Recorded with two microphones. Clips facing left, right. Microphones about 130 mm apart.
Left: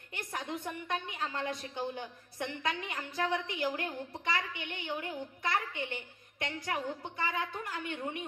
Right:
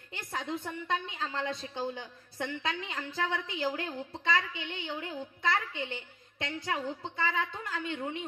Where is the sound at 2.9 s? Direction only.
25° right (ahead or behind).